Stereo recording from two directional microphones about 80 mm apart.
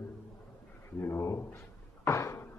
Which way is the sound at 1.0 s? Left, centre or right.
Left.